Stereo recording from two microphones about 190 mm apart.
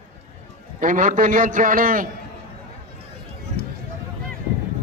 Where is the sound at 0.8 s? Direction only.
45° right (ahead or behind).